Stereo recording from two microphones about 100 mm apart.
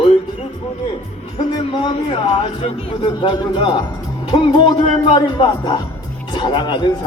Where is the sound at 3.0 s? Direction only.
55° left (ahead or behind).